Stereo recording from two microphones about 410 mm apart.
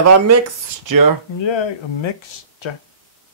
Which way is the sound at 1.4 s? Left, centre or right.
Left.